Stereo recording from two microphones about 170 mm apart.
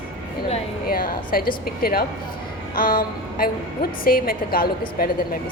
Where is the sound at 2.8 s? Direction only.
55° left (ahead or behind).